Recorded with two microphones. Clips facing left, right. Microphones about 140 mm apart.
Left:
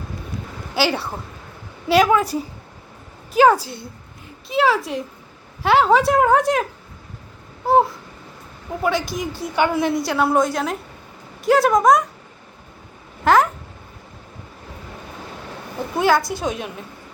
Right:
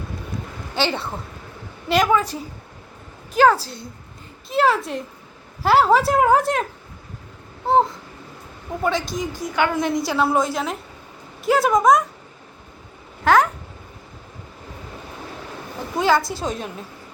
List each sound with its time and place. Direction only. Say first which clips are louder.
0.8 s a woman's voice: left 2 dB; 5° left (ahead or behind)
4.4 s speech: even; centre (ahead or behind)
7.7 s speech: left 1 dB; 5° left (ahead or behind)
9.0 s a woman's voice: even; 20° right (ahead or behind)
9.6 s a woman's voice: left 2 dB; 10° left (ahead or behind)
10.1 s speech: left 2 dB; centre (ahead or behind)
13.2 s speech: left 1 dB; centre (ahead or behind)
16.0 s speech: left 1 dB; centre (ahead or behind)